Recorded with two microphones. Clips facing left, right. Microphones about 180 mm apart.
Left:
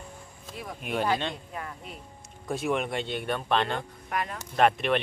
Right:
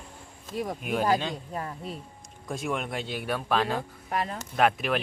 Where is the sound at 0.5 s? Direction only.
40° right (ahead or behind).